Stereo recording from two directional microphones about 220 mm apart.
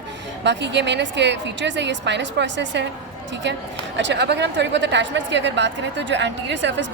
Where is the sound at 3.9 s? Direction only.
55° right (ahead or behind).